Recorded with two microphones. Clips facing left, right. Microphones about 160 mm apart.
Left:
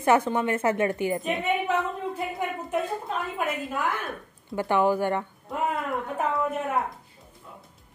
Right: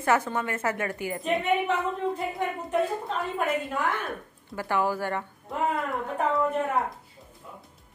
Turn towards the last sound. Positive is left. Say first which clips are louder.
# right 1 dB
turn(degrees=0)  # may be behind; listen again after turning